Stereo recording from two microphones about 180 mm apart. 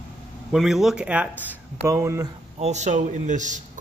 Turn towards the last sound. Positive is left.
turn(degrees=-45)  # may be behind; listen again after turning